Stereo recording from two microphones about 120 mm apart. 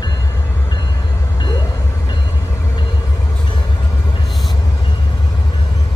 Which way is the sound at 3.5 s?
40° left (ahead or behind).